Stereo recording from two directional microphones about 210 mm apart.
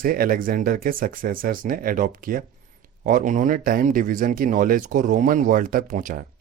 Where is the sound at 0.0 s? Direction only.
45° right (ahead or behind).